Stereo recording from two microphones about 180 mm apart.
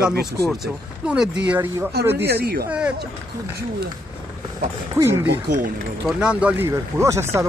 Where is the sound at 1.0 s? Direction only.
5° right (ahead or behind).